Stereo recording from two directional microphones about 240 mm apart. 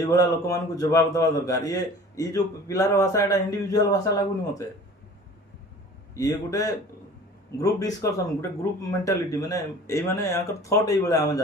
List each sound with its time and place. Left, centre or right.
0.1 s a man's voice: centre
6.1 s a man's voice: centre